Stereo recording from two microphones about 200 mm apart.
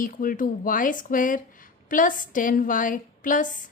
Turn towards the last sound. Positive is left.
turn(degrees=40)  # may be behind; listen again after turning